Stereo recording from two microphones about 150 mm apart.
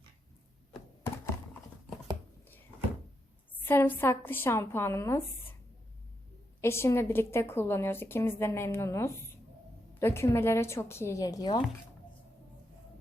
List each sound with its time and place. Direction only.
3.7 s a woman's voice: 15° left (ahead or behind)
6.6 s a woman's voice: 15° left (ahead or behind)